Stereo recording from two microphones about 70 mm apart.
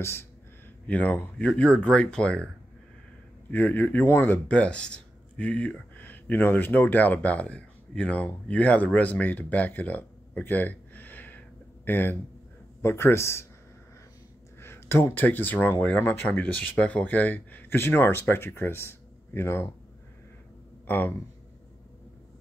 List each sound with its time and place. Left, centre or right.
0.0 s speech: left
0.8 s speech: left
3.4 s speech: left
4.0 s speech: left
4.3 s speech: left
14.6 s speech: left
20.8 s speech: left